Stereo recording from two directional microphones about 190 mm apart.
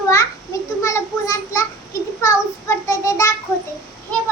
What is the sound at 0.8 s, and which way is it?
Child singing, 15° left (ahead or behind).